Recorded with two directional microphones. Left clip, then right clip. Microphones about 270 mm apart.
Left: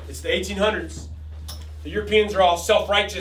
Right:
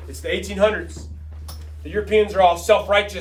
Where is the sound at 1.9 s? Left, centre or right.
Right.